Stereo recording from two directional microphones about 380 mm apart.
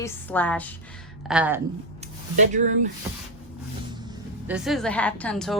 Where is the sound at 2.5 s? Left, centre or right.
Centre.